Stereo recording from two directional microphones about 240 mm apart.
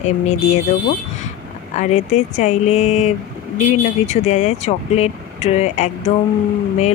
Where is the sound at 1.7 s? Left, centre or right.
Left.